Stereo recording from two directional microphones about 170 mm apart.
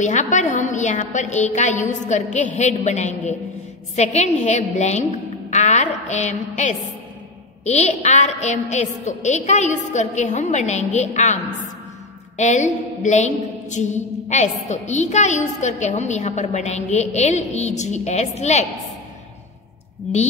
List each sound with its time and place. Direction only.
0.0 s a woman's voice: 45° left (ahead or behind)
5.5 s a sound: 45° left (ahead or behind)
7.6 s a woman's voice: 40° left (ahead or behind)
12.4 s a woman's voice: 45° left (ahead or behind)